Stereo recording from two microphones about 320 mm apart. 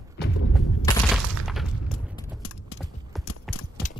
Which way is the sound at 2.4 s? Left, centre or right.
Left.